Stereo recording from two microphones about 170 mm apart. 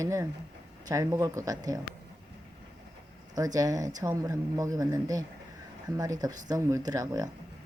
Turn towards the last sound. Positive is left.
turn(degrees=-20)  # may be behind; listen again after turning